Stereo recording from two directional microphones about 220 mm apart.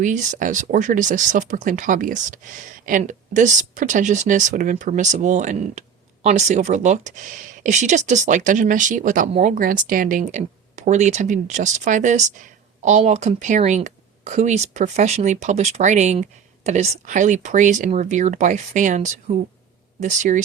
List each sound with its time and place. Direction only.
0.0 s speech: 35° right (ahead or behind)